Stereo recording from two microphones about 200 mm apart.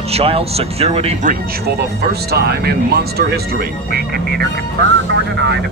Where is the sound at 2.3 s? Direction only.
55° right (ahead or behind).